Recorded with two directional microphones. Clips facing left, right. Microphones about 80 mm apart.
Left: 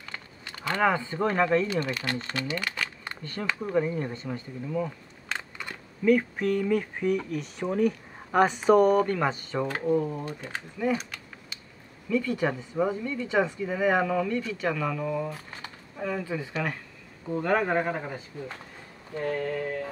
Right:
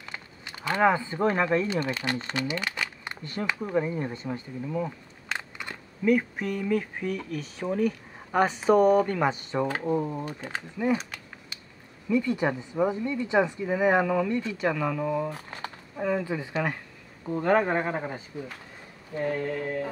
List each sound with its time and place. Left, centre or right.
0.0 s speech: centre
4.6 s a sound: centre
6.3 s speech: centre
14.3 s speech: right
15.3 s a sound: right
16.0 s speech: centre
16.3 s speech: right